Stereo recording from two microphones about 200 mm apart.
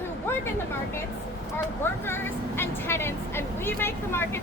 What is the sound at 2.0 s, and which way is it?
Speech, 10° left (ahead or behind).